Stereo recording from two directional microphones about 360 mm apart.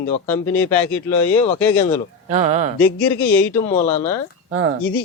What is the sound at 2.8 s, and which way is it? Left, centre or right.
Speech, centre.